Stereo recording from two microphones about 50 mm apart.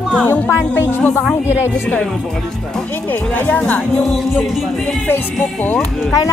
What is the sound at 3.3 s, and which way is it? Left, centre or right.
Speech, left.